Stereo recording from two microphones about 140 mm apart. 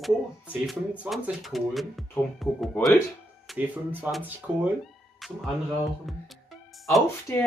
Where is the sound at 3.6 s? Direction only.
15° right (ahead or behind).